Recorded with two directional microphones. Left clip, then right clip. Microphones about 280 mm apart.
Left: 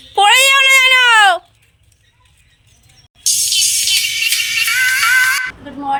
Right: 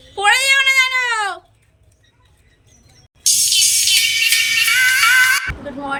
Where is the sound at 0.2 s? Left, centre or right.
Centre.